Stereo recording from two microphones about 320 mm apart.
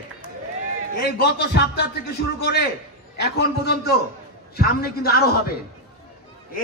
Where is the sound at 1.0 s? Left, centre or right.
Left.